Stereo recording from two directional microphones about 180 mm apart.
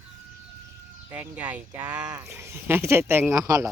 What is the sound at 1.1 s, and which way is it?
Speech, 10° right (ahead or behind).